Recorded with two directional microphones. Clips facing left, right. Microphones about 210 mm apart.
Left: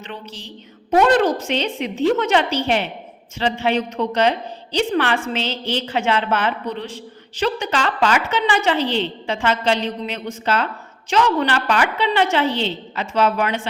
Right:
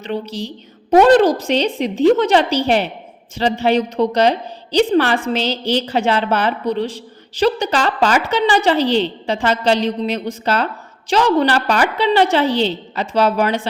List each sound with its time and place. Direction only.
0.0 s a woman's voice: 35° right (ahead or behind)